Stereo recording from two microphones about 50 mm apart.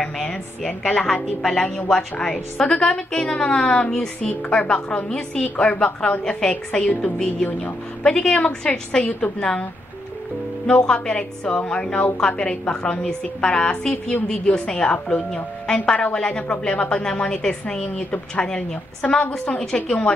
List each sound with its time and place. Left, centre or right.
0.0 s a woman's voice: centre
10.7 s a woman's voice: centre